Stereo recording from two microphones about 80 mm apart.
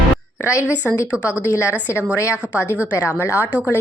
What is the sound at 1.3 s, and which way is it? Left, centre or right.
Speech, left.